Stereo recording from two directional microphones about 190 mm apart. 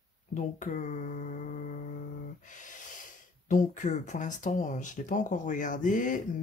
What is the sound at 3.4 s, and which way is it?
Speech, 40° left (ahead or behind).